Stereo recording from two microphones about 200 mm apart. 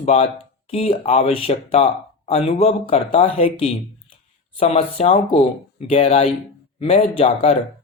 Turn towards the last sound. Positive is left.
turn(degrees=30)  # may be behind; listen again after turning